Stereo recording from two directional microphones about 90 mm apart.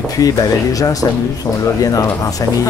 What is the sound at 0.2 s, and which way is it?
Speech, 45° left (ahead or behind).